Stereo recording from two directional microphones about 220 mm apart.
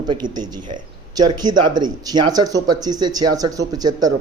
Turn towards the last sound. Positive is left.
turn(degrees=-15)  # may be behind; listen again after turning